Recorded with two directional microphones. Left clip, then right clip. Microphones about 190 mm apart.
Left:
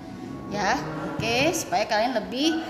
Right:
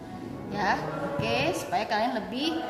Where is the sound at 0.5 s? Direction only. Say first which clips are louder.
Left 2 dB; 45° left (ahead or behind).